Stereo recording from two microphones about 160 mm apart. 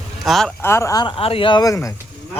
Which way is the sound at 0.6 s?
15° left (ahead or behind).